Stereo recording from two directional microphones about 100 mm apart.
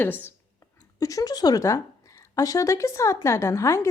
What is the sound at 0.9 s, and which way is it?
A woman's voice, 35° left (ahead or behind).